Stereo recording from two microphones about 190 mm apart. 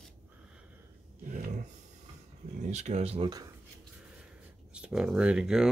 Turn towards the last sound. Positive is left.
turn(degrees=-5)  # may be behind; listen again after turning